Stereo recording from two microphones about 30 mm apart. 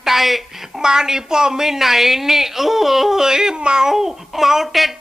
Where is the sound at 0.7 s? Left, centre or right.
Right.